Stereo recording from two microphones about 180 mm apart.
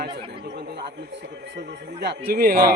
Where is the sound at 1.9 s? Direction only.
60° right (ahead or behind).